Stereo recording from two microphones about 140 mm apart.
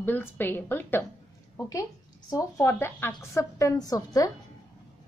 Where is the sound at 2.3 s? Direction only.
25° left (ahead or behind).